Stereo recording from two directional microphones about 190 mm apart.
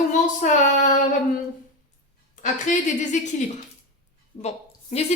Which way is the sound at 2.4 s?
40° left (ahead or behind).